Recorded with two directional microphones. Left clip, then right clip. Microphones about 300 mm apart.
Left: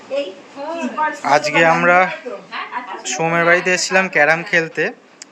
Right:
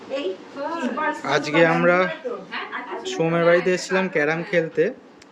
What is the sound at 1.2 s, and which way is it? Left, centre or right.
Speech, centre.